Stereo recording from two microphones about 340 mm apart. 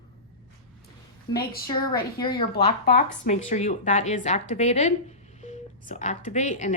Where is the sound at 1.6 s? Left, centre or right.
Centre.